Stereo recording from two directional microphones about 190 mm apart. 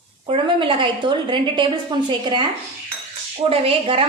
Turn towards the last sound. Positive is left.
turn(degrees=-30)  # may be behind; listen again after turning